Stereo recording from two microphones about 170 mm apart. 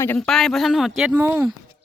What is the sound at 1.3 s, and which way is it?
Speech, 15° right (ahead or behind).